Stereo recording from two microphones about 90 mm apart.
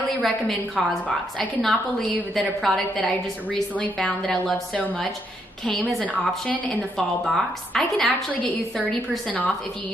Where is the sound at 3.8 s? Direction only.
15° left (ahead or behind).